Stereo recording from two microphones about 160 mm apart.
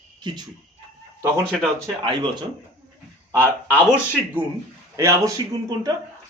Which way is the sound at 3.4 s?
15° right (ahead or behind).